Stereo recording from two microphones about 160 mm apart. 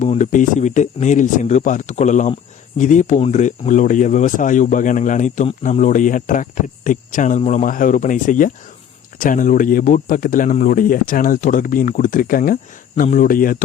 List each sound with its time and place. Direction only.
0.0 s speech: 50° left (ahead or behind)